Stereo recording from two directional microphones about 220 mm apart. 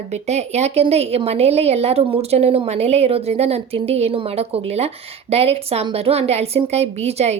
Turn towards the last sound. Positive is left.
turn(degrees=-30)  # may be behind; listen again after turning